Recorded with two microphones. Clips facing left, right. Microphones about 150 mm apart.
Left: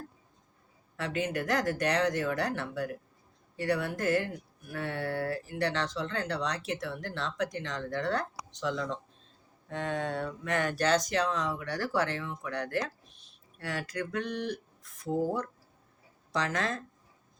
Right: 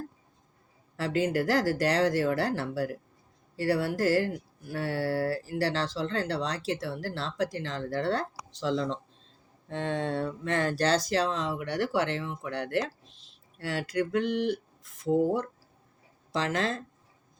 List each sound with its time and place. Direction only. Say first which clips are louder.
0.9 s speech: right 5 dB; 30° right (ahead or behind)
13.1 s a sound: right 2 dB; 90° right
13.6 s speech: right 5 dB; 25° right (ahead or behind)